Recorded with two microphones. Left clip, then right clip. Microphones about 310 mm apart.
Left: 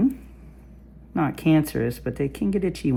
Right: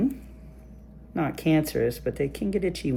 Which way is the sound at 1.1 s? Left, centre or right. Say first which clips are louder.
Left 3 dB; centre.